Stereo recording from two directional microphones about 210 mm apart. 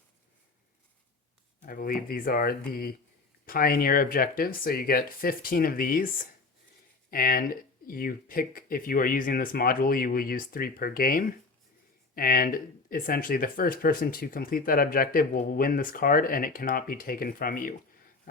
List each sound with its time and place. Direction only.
1.6 s speech: 45° left (ahead or behind)
7.1 s speech: 45° left (ahead or behind)